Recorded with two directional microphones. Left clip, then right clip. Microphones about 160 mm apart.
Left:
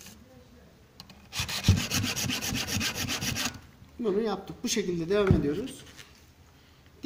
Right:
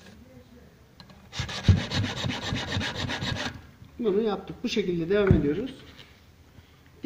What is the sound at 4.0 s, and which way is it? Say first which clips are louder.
Speech: right 3 dB; 30° left (ahead or behind).